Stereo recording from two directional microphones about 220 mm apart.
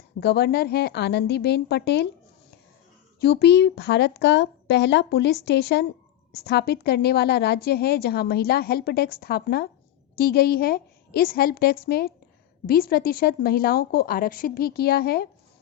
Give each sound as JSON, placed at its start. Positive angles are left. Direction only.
{"t": 0.2, "sound": "a woman's voice", "side_deg": 45}
{"t": 3.2, "sound": "a woman's voice", "side_deg": 45}